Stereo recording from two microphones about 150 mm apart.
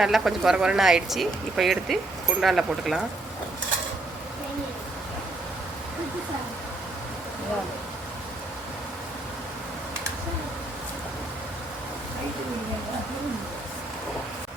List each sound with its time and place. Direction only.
0.0 s speech: 5° right (ahead or behind)